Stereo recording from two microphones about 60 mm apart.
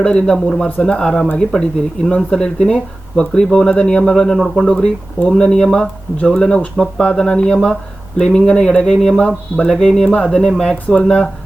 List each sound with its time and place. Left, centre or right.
0.0 s speech: centre